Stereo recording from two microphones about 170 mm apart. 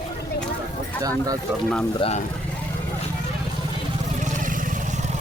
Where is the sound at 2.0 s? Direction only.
35° left (ahead or behind).